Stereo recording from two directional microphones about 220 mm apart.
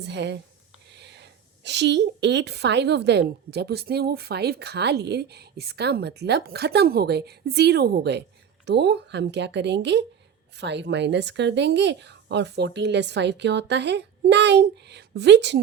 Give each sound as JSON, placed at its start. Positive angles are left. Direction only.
{"t": 0.0, "sound": "a woman's voice", "side_deg": -50}